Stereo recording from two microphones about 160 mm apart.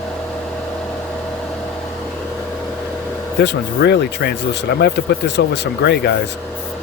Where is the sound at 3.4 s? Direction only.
90° left.